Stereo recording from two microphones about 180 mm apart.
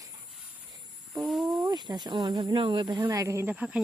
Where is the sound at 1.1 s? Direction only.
20° right (ahead or behind).